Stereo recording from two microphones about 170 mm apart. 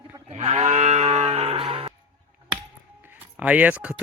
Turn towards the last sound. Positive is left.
turn(degrees=-10)  # may be behind; listen again after turning